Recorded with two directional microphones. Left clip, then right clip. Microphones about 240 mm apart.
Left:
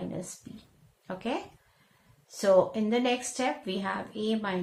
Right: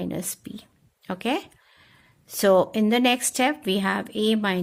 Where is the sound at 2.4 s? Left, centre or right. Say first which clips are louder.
Right 4 dB; right.